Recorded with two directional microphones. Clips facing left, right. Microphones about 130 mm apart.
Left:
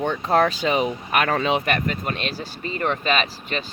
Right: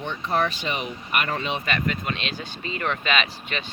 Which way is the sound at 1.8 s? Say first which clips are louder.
Left 2 dB; 40° left (ahead or behind).